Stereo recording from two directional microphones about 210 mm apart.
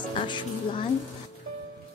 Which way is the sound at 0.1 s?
25° left (ahead or behind).